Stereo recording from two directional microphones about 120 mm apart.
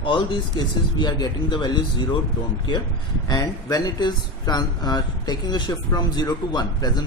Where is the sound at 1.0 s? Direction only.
40° left (ahead or behind).